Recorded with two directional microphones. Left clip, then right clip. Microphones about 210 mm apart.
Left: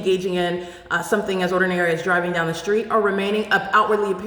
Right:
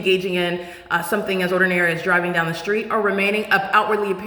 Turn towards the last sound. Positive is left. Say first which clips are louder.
# even
turn(degrees=-5)  # may be behind; listen again after turning